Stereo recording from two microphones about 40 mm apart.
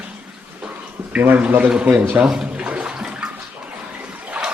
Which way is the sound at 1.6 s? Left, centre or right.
Right.